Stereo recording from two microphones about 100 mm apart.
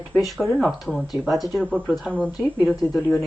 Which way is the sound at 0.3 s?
Centre (ahead or behind).